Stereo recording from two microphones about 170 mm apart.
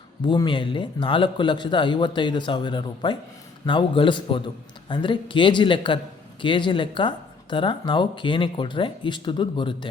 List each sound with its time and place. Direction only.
0.3 s a man's voice: 30° left (ahead or behind)